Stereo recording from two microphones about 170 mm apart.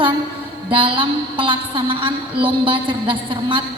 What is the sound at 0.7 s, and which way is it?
A woman's voice, 30° right (ahead or behind).